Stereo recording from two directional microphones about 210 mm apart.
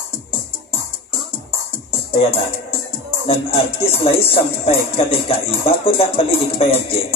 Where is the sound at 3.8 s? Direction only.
25° left (ahead or behind).